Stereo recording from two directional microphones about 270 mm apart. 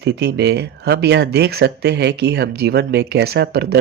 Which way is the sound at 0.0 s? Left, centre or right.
Right.